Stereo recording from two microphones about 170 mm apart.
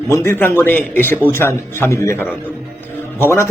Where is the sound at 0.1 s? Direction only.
15° left (ahead or behind).